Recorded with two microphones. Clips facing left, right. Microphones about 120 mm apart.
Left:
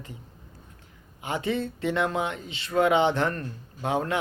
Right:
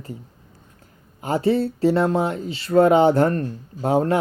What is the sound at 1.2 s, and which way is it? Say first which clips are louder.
Speech: right 8 dB; 40° right (ahead or behind).